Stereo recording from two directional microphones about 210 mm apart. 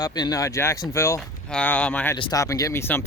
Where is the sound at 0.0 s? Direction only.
20° left (ahead or behind).